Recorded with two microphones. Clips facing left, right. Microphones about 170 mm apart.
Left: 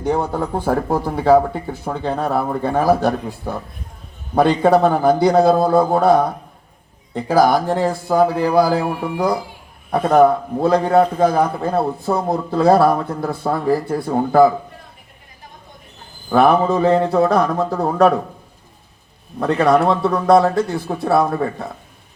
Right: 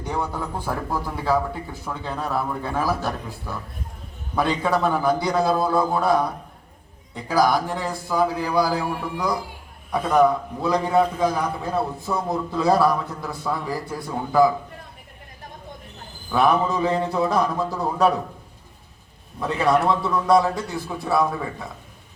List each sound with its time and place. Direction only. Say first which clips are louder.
0.0 s a man's voice: left 8 dB; 55° left (ahead or behind)
16.3 s a man's voice: left 6 dB; 55° left (ahead or behind)
19.4 s a man's voice: left 6 dB; 60° left (ahead or behind)